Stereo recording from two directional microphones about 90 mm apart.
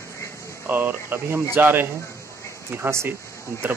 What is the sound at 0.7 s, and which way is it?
Speech, 20° right (ahead or behind).